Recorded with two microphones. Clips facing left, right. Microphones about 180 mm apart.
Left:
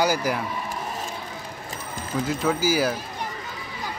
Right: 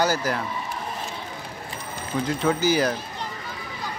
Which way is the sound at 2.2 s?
5° left (ahead or behind).